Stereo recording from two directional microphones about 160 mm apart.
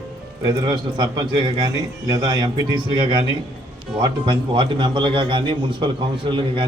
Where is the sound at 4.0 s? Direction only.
30° right (ahead or behind).